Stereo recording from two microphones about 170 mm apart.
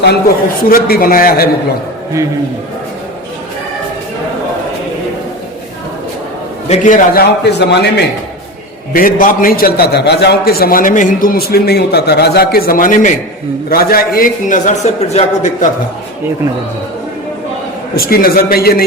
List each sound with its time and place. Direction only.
0.7 s a man's voice: 60° left (ahead or behind)
6.7 s a man's voice: 50° left (ahead or behind); by 8.0 s 85° left
8.9 s a man's voice: 55° left (ahead or behind)
13.7 s a man's voice: 60° left (ahead or behind)
17.9 s a man's voice: 60° left (ahead or behind)